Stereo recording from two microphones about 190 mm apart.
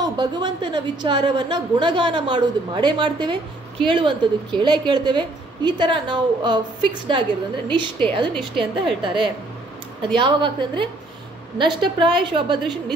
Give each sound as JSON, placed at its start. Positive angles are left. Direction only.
{"t": 0.0, "sound": "a woman's voice", "side_deg": -20}